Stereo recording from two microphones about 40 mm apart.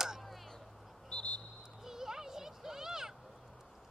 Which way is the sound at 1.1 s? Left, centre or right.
Left.